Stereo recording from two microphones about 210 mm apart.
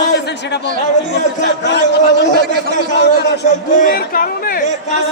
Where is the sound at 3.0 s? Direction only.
50° left (ahead or behind).